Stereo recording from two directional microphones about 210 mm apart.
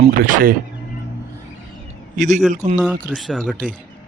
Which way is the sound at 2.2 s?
35° right (ahead or behind).